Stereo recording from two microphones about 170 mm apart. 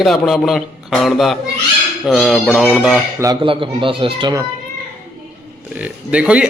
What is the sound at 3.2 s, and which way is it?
Speech, 25° right (ahead or behind).